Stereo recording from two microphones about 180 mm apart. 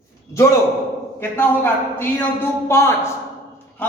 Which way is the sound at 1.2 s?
10° left (ahead or behind).